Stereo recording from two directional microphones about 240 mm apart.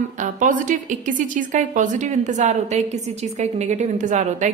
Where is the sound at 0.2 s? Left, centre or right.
Right.